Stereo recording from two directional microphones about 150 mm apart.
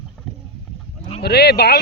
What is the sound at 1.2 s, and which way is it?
Speech, 90° left.